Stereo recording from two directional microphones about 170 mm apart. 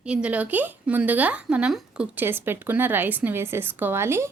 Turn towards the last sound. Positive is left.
turn(degrees=-15)  # may be behind; listen again after turning